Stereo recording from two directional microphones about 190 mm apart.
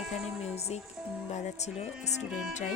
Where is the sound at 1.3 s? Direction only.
35° left (ahead or behind).